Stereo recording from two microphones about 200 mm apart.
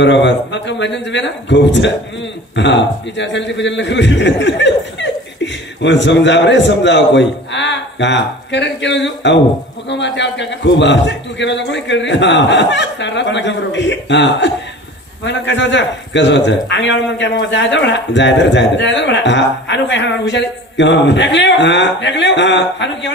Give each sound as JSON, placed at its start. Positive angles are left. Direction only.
{"t": 0.0, "sound": "a man's voice", "side_deg": 60}